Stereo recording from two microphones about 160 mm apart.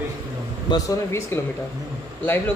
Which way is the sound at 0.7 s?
20° left (ahead or behind).